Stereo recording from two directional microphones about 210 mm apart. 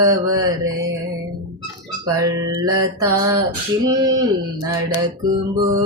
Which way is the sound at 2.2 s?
15° right (ahead or behind).